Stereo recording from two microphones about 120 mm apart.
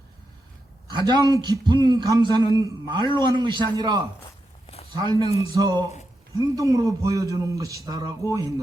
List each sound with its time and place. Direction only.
0.9 s a man's voice: 35° right (ahead or behind)
4.6 s a sound: 60° left (ahead or behind)
4.9 s a man's voice: 35° right (ahead or behind)